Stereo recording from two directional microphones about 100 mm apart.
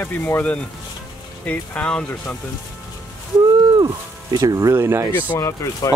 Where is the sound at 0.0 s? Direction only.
20° left (ahead or behind).